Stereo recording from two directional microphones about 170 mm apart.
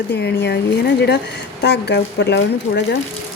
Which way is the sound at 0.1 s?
85° left.